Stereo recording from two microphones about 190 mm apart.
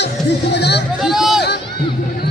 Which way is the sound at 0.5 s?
60° left (ahead or behind).